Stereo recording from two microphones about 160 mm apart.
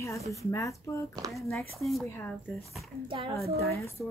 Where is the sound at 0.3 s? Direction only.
20° left (ahead or behind).